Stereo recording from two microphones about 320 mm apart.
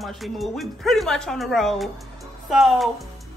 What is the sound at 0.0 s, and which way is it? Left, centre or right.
Speech, centre.